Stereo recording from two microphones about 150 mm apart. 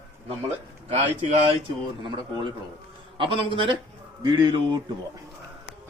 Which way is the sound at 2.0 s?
30° right (ahead or behind).